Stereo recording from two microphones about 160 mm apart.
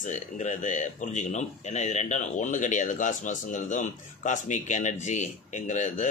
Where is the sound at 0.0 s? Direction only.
50° left (ahead or behind).